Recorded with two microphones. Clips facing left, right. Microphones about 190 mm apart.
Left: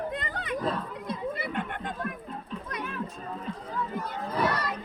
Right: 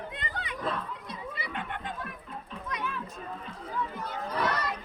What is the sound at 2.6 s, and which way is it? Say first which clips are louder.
Music: right 3 dB; 50° left (ahead or behind).